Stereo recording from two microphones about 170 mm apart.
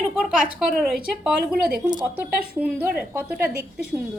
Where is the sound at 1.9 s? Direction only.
25° right (ahead or behind).